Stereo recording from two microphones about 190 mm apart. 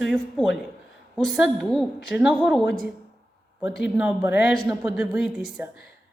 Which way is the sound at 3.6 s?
5° right (ahead or behind).